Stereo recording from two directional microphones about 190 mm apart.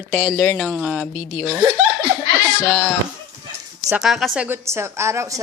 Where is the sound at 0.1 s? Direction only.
10° right (ahead or behind).